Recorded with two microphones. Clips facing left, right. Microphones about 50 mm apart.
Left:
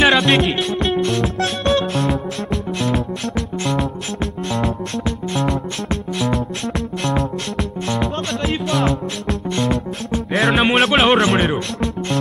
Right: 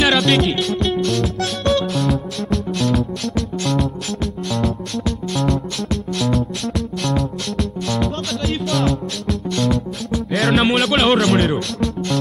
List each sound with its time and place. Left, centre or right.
0.0 s music: centre
4.9 s music: left
7.5 s music: left
10.3 s music: centre
11.1 s music: left